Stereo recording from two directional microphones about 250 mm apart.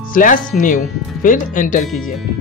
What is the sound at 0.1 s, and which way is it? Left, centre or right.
Speech, left.